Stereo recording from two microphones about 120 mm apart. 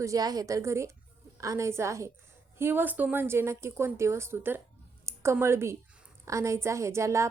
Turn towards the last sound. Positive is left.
turn(degrees=-25)  # may be behind; listen again after turning